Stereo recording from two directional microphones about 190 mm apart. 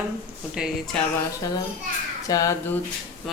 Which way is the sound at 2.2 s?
20° left (ahead or behind).